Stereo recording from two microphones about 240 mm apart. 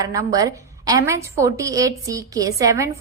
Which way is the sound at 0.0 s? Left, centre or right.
Centre.